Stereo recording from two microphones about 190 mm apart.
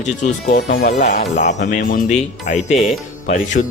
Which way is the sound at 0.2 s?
45° left (ahead or behind).